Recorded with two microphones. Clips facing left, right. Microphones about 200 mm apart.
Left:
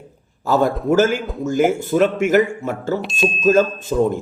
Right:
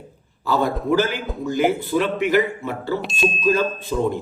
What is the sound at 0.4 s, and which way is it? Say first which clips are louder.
Speech: left 4 dB; 45° left (ahead or behind).